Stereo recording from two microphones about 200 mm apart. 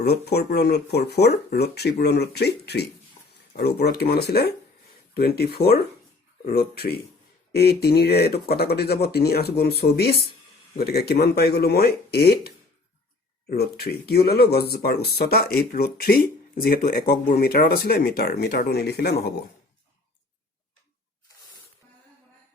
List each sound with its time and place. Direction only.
0.0 s speech: 55° left (ahead or behind)
3.8 s speech: 55° left (ahead or behind)